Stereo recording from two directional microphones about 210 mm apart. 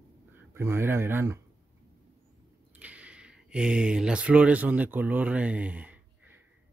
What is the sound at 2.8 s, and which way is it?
A man's voice, 5° right (ahead or behind).